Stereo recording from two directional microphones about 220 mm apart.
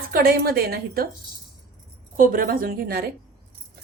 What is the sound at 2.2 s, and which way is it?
Speech, 40° right (ahead or behind).